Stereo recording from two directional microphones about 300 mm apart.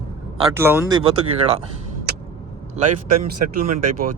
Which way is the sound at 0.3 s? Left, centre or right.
Centre.